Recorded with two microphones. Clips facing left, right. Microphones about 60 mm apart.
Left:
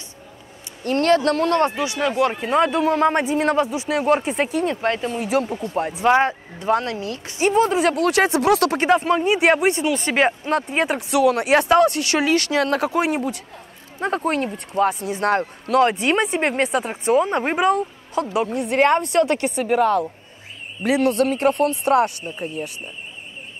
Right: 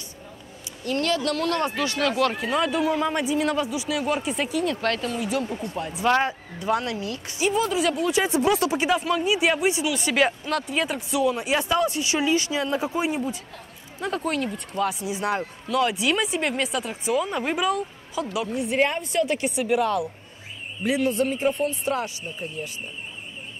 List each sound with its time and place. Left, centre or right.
0.8 s speech: left
1.8 s speech: centre
2.3 s speech: left
4.8 s speech: left
5.8 s speech: left
7.4 s a woman's voice: left
7.9 s speech: left
8.7 s speech: left
11.0 s speech: left
13.9 s speech: left
14.9 s a woman's voice: left
19.5 s speech: left
20.8 s speech: left